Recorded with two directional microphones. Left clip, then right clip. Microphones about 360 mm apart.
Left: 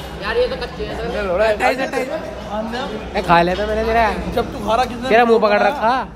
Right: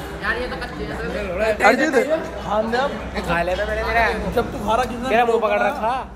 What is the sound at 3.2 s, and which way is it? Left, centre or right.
Speech, centre.